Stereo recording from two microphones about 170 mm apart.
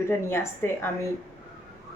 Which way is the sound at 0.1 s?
15° left (ahead or behind).